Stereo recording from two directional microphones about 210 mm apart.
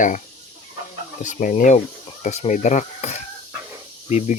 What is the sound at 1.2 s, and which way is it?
Speech, 40° left (ahead or behind).